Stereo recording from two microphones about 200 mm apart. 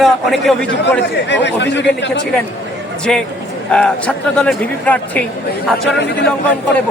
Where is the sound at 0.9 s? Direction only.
60° left (ahead or behind).